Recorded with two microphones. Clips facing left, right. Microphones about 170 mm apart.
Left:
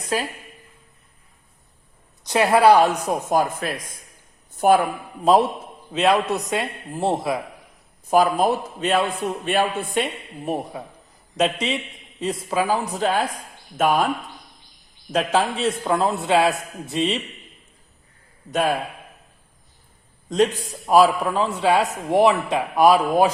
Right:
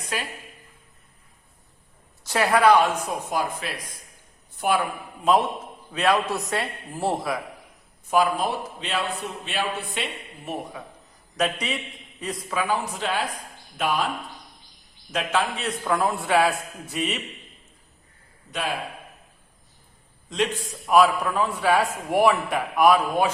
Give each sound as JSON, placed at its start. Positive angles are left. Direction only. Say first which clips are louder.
{"t": 0.1, "sound": "speech", "louder": "left 7 dB", "side_deg": 35}
{"t": 2.2, "sound": "speech", "louder": "left 4 dB", "side_deg": 20}
{"t": 5.9, "sound": "a man's voice", "louder": "left 3 dB", "side_deg": 20}
{"t": 8.1, "sound": "a man's voice", "louder": "left 4 dB", "side_deg": 40}
{"t": 11.3, "sound": "a man's voice", "louder": "left 4 dB", "side_deg": 25}
{"t": 15.1, "sound": "a man's voice", "louder": "left 5 dB", "side_deg": 35}
{"t": 20.3, "sound": "a man's voice", "louder": "left 6 dB", "side_deg": 40}